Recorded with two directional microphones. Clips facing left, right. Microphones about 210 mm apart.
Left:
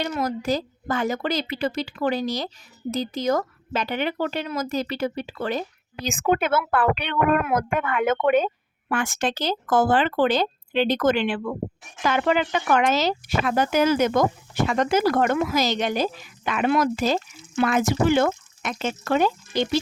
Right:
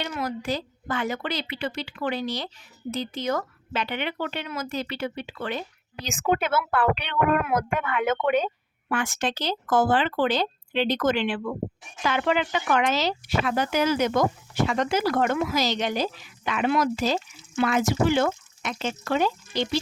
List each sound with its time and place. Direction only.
0.0 s speech: 40° left (ahead or behind)